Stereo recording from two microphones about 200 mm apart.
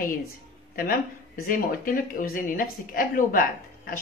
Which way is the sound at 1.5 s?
45° left (ahead or behind).